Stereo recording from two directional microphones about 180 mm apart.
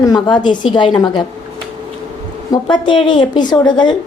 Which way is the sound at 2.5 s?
25° left (ahead or behind).